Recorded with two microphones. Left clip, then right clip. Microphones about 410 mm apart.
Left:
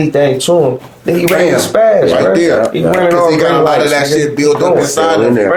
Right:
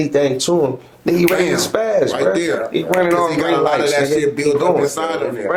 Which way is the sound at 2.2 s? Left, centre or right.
Centre.